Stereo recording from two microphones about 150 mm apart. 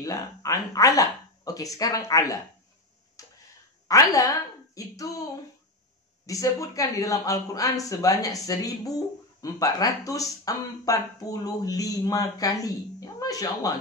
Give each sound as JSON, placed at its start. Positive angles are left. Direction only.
{"t": 0.0, "sound": "speech", "side_deg": 20}
{"t": 3.2, "sound": "tick-tock", "side_deg": 20}
{"t": 3.8, "sound": "a woman's voice", "side_deg": 25}
{"t": 6.2, "sound": "speech", "side_deg": 20}